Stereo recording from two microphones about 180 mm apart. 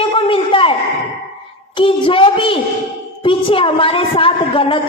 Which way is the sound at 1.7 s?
30° left (ahead or behind).